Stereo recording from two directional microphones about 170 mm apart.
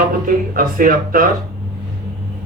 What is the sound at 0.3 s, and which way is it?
Speech, 55° right (ahead or behind).